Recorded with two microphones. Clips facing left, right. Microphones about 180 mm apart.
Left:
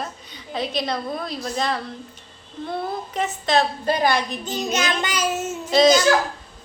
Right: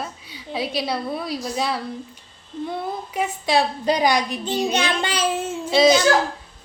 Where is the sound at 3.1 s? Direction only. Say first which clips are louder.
Even; 10° right (ahead or behind).